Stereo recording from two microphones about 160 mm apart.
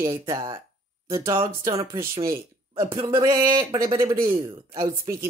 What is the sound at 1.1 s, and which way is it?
Speech, 20° right (ahead or behind).